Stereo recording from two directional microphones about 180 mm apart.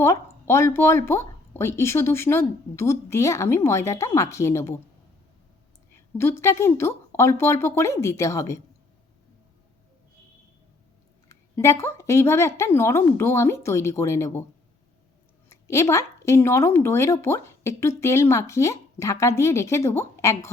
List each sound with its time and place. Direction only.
0.0 s speech: 15° left (ahead or behind)
6.1 s speech: 15° left (ahead or behind)
11.3 s speech: 15° left (ahead or behind)
15.4 s speech: 15° left (ahead or behind)